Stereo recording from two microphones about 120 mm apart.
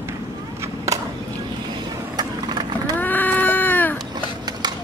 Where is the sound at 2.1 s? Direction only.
35° right (ahead or behind).